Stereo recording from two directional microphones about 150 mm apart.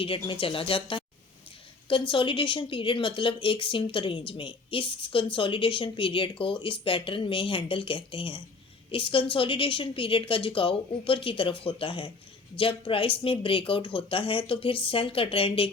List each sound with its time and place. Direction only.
0.0 s speech: 35° left (ahead or behind)